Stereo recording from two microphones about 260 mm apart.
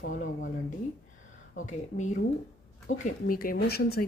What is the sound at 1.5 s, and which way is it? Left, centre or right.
Speech, left.